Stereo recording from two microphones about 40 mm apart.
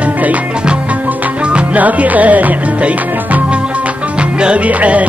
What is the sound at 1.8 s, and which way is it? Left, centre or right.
Music, right.